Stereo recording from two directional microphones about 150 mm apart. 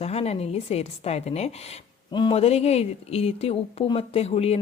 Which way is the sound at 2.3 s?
45° left (ahead or behind).